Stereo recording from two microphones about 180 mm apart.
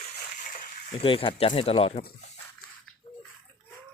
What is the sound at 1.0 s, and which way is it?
Speech, 30° left (ahead or behind).